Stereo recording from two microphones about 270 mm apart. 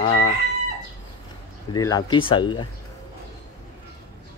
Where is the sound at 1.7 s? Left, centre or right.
Centre.